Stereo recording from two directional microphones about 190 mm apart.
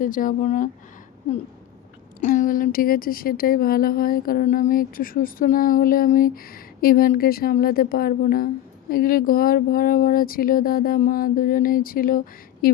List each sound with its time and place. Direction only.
0.0 s speech: 45° left (ahead or behind)
2.2 s speech: 45° left (ahead or behind)